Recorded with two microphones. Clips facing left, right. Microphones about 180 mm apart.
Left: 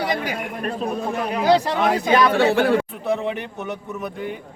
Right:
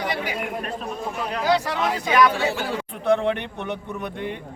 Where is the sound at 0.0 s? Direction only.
40° left (ahead or behind).